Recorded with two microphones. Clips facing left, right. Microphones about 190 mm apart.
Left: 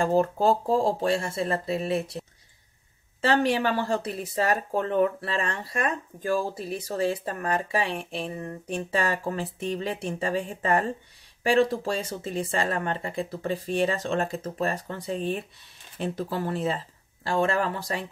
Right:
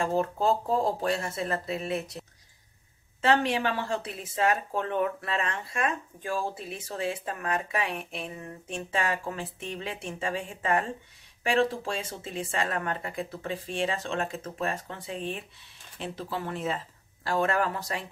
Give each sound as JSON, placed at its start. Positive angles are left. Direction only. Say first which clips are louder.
{"t": 0.0, "sound": "speech", "louder": "left 4 dB", "side_deg": 35}
{"t": 3.2, "sound": "speech", "louder": "left 2 dB", "side_deg": 35}